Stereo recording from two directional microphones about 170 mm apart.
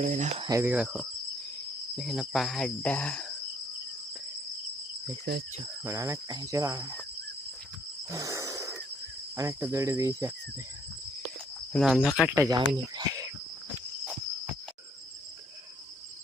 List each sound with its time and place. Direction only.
0.0 s speech: 45° right (ahead or behind)
0.4 s speech: 15° right (ahead or behind); by 3.3 s 5° left (ahead or behind)
5.8 s speech: 20° right (ahead or behind)
8.1 s a sound: 20° right (ahead or behind)
9.3 s speech: 20° right (ahead or behind)
11.7 s speech: centre (ahead or behind)
12.3 s speech: 15° right (ahead or behind)
12.5 s cricket: 25° right (ahead or behind)